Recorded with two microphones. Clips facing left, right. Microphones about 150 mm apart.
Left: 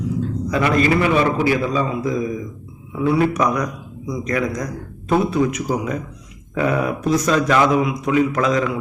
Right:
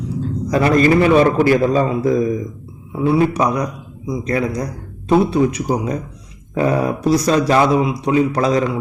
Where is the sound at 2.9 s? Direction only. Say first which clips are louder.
Right 2 dB; 30° right (ahead or behind).